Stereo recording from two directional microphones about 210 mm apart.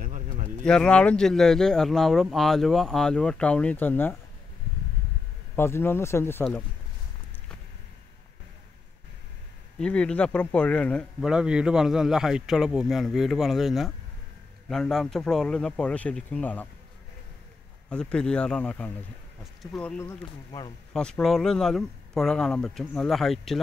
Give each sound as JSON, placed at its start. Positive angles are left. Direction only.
{"t": 0.0, "sound": "bird", "side_deg": -40}
{"t": 0.7, "sound": "speech", "side_deg": 5}
{"t": 5.6, "sound": "speech", "side_deg": 10}
{"t": 9.8, "sound": "speech", "side_deg": 5}
{"t": 17.8, "sound": "speech", "side_deg": 5}
{"t": 20.0, "sound": "speech", "side_deg": 15}
{"t": 20.9, "sound": "speech", "side_deg": 5}